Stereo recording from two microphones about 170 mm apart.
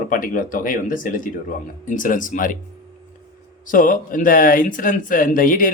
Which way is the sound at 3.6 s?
50° left (ahead or behind).